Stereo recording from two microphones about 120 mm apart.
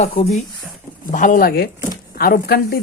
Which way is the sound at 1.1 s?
90° left.